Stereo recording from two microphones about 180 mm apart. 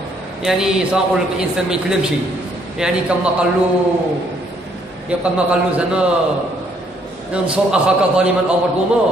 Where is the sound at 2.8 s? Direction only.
5° right (ahead or behind).